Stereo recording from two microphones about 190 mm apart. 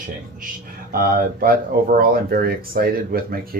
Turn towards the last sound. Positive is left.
turn(degrees=-50)  # may be behind; listen again after turning